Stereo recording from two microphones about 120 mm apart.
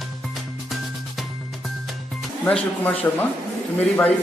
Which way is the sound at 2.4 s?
10° left (ahead or behind).